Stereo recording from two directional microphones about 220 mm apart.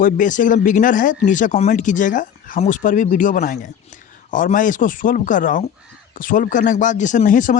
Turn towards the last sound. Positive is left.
turn(degrees=35)  # may be behind; listen again after turning